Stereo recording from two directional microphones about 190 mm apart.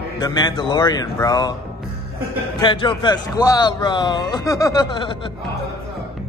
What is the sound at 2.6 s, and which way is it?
A man's voice, 25° left (ahead or behind).